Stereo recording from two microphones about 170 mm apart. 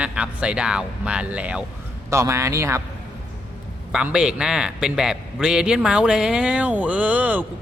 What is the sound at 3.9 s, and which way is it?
A man's voice, 5° right (ahead or behind).